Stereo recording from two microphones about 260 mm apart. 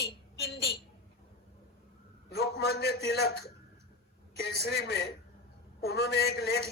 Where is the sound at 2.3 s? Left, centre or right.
Left.